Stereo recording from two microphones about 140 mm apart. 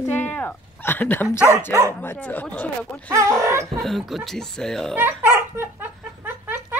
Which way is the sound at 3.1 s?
20° right (ahead or behind).